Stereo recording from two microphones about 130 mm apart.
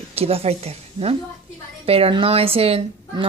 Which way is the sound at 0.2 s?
50° right (ahead or behind).